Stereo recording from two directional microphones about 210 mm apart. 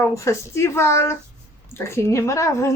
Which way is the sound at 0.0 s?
15° left (ahead or behind).